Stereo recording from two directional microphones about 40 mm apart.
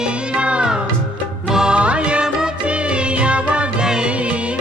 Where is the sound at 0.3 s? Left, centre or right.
Right.